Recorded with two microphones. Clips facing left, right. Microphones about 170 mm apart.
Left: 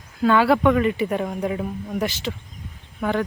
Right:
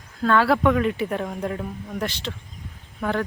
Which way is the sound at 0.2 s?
5° left (ahead or behind).